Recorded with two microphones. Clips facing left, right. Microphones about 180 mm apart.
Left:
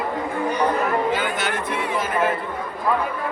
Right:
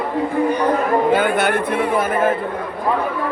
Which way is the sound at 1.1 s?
55° right (ahead or behind).